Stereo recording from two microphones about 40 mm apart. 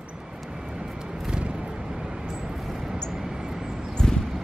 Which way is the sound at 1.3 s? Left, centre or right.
Right.